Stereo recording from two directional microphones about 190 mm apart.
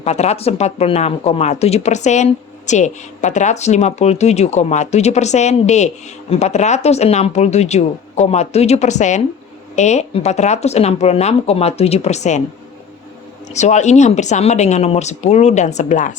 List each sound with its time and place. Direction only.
0.0 s speech: 35° left (ahead or behind)
13.5 s speech: 35° left (ahead or behind)